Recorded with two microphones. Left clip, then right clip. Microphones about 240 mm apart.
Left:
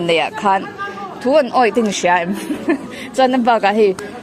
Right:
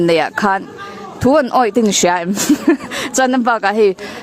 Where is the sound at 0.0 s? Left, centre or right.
Right.